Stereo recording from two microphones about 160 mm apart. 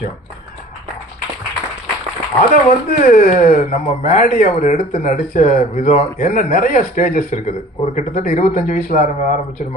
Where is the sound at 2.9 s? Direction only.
60° left (ahead or behind).